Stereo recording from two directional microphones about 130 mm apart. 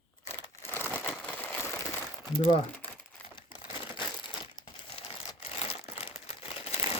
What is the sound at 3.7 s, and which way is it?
Crumpling, 40° left (ahead or behind).